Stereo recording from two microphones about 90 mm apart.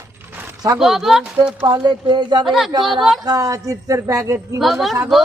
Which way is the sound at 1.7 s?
60° right (ahead or behind).